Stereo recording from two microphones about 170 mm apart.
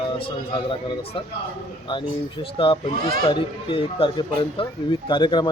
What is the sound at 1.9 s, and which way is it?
Speech, 30° left (ahead or behind).